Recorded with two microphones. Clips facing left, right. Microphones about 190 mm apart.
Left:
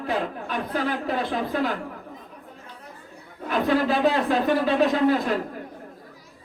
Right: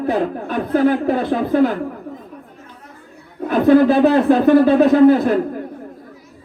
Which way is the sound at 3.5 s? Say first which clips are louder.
Right 10 dB; 50° right (ahead or behind).